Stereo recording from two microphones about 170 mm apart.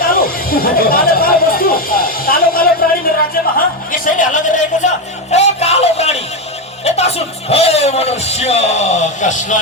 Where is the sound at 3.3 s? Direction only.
55° left (ahead or behind); by 6.2 s 40° left (ahead or behind).